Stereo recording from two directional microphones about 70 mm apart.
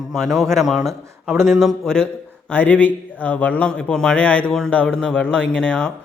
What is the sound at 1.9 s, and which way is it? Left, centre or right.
Speech, centre.